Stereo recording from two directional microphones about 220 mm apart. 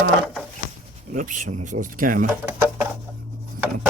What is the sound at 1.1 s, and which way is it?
Speech, 35° right (ahead or behind).